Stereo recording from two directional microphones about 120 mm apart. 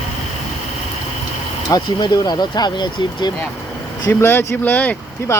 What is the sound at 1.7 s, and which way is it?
Speech, 35° left (ahead or behind).